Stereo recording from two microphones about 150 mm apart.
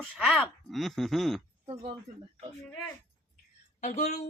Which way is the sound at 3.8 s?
50° left (ahead or behind).